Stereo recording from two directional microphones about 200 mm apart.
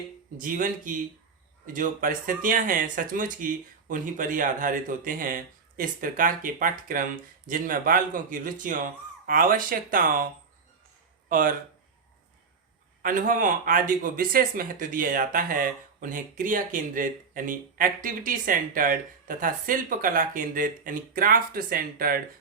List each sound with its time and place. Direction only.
0.3 s speech: 45° right (ahead or behind)
11.3 s speech: 45° right (ahead or behind)
13.0 s speech: 45° right (ahead or behind)